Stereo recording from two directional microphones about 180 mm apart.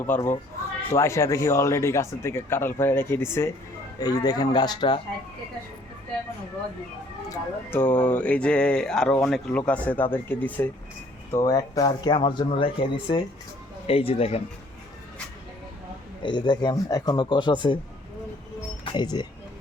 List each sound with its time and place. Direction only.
0.0 s speech: 15° left (ahead or behind)
7.3 s speech: 10° left (ahead or behind); by 14.4 s 35° left (ahead or behind)
16.2 s speech: 25° left (ahead or behind)
18.9 s speech: 25° left (ahead or behind)